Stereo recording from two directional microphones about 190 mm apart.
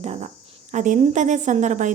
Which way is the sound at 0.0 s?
35° right (ahead or behind).